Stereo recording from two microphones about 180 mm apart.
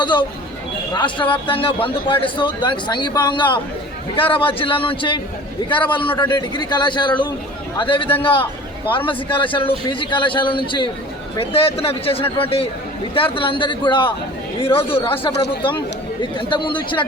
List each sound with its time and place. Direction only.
0.0 s a man's voice: 25° left (ahead or behind)